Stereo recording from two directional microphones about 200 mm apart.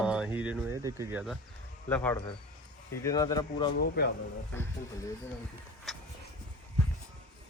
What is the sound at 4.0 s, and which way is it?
Speech, 55° left (ahead or behind).